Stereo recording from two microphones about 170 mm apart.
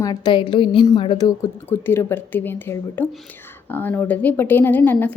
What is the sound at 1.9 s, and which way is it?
A woman's voice, 15° left (ahead or behind).